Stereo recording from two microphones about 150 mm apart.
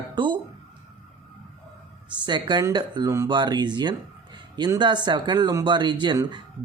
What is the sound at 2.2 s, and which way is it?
Speech, 30° right (ahead or behind).